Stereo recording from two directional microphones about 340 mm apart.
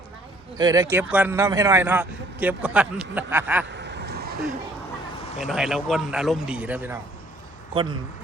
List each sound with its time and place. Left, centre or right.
0.5 s a man's voice: centre
3.8 s vehicle: right
5.4 s a man's voice: centre